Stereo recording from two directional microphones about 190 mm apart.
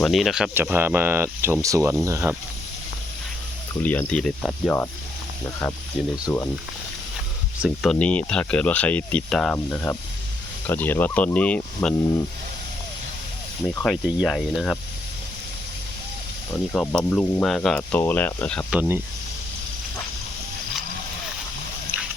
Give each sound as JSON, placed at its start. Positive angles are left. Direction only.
{"t": 0.0, "sound": "speech", "side_deg": 0}
{"t": 3.8, "sound": "speech", "side_deg": 10}
{"t": 6.3, "sound": "speech", "side_deg": 10}
{"t": 7.6, "sound": "speech", "side_deg": 0}
{"t": 13.8, "sound": "speech", "side_deg": -5}
{"t": 16.7, "sound": "speech", "side_deg": 5}
{"t": 18.8, "sound": "speech", "side_deg": -10}